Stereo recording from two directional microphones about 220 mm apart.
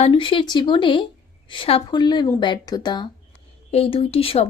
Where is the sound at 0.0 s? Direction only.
25° left (ahead or behind).